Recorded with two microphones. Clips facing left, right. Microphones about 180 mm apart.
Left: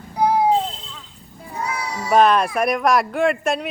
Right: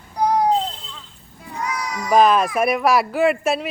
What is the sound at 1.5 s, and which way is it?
Cat, 25° left (ahead or behind).